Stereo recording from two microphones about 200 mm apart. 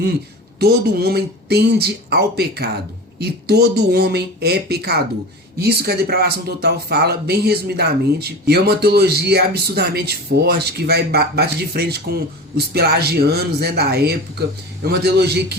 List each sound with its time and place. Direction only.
0.6 s speech: 50° right (ahead or behind)